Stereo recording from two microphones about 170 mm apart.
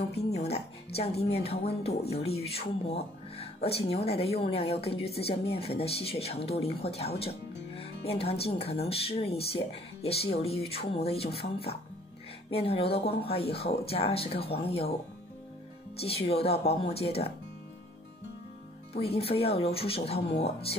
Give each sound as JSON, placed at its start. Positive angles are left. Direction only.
{"t": 0.1, "sound": "speech", "side_deg": 40}
{"t": 16.0, "sound": "speech", "side_deg": 35}
{"t": 18.9, "sound": "speech", "side_deg": 35}